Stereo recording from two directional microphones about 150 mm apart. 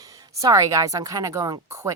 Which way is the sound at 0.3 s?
20° right (ahead or behind).